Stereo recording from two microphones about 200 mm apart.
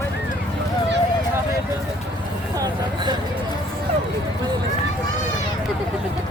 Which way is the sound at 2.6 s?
20° right (ahead or behind).